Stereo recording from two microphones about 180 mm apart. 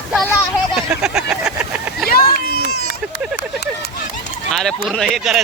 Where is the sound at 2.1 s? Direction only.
60° left (ahead or behind).